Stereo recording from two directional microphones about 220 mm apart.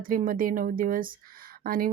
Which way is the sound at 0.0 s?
40° right (ahead or behind).